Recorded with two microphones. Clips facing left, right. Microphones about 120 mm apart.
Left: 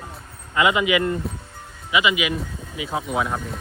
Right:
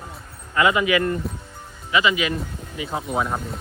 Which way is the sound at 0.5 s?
15° left (ahead or behind).